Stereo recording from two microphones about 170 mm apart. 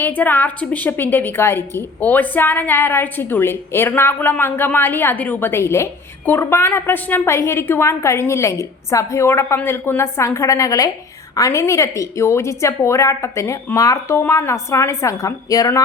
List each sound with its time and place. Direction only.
0.0 s a woman's voice: 10° left (ahead or behind)